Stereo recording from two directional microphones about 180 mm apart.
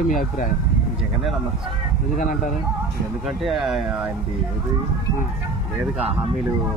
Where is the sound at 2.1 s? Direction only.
45° left (ahead or behind).